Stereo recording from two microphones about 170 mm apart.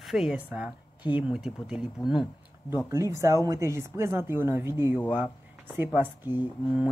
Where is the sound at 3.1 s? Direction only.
20° right (ahead or behind).